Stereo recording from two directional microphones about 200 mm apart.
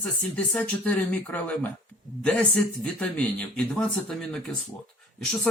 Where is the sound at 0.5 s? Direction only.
5° left (ahead or behind).